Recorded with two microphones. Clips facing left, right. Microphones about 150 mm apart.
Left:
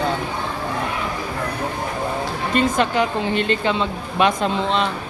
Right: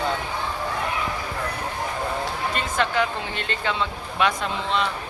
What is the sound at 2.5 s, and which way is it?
A woman's voice, 20° left (ahead or behind).